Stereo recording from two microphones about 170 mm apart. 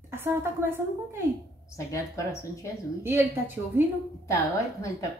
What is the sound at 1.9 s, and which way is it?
Speech, 20° left (ahead or behind).